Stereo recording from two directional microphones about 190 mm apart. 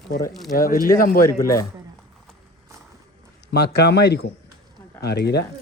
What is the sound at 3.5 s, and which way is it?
Speech, 60° left (ahead or behind).